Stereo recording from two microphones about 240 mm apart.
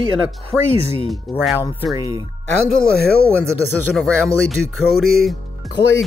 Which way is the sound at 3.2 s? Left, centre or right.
Centre.